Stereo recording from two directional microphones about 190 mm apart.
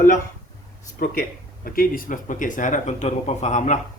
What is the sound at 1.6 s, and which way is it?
Speech, 50° left (ahead or behind).